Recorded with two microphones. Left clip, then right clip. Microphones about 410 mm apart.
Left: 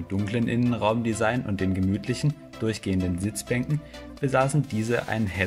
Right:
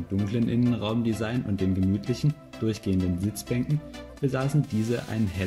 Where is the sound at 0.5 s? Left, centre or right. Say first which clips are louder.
Left 5 dB; centre.